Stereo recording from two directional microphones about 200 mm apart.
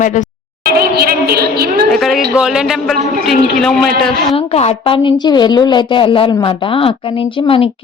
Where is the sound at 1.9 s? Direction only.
Centre (ahead or behind).